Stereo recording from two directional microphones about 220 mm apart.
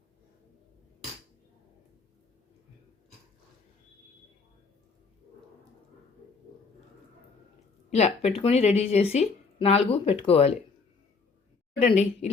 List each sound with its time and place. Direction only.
7.9 s speech: 30° left (ahead or behind)
11.9 s speech: 30° left (ahead or behind)